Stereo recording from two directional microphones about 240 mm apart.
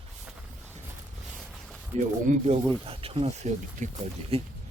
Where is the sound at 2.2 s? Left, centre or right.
Right.